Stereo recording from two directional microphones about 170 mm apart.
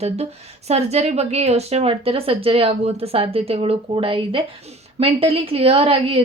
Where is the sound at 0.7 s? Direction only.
40° right (ahead or behind).